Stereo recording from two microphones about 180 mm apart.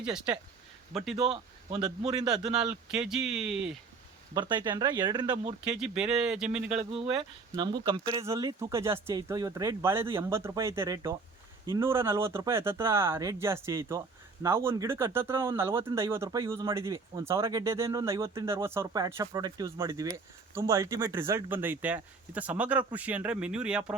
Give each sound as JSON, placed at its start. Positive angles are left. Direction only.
{"t": 1.3, "sound": "a man's voice", "side_deg": -30}
{"t": 3.0, "sound": "speech", "side_deg": 0}
{"t": 4.4, "sound": "speech", "side_deg": -25}
{"t": 5.6, "sound": "speech", "side_deg": -5}
{"t": 7.2, "sound": "speech", "side_deg": -25}